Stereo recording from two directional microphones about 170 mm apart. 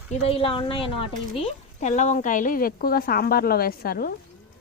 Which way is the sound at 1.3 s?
40° left (ahead or behind).